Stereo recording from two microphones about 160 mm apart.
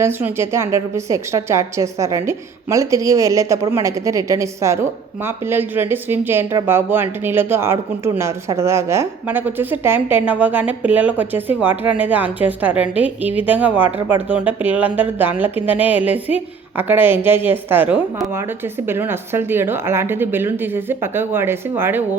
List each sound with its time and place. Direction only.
0.0 s a woman's voice: 15° right (ahead or behind)